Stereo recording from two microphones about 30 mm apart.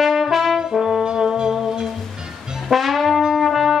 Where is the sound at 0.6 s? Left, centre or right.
Centre.